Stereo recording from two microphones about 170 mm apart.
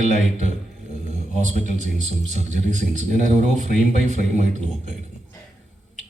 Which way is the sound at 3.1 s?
50° left (ahead or behind).